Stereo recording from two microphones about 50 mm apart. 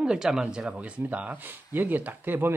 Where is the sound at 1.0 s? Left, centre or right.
Right.